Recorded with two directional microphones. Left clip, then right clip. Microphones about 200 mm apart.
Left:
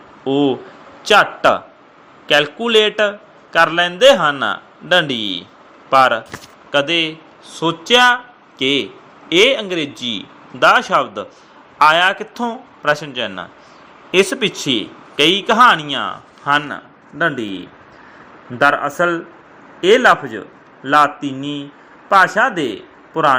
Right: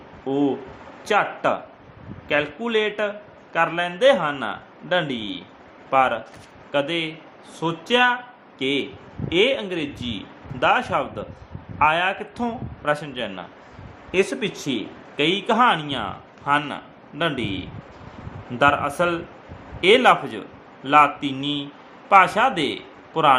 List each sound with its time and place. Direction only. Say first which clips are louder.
0.3 s a man's voice: left 6 dB; 20° left (ahead or behind)
18.6 s a man's voice: left 5 dB; 15° left (ahead or behind)